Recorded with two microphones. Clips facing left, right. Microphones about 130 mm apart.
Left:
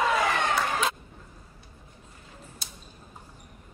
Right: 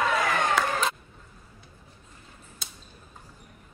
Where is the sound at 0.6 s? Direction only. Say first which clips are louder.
Right 2 dB; 90° right.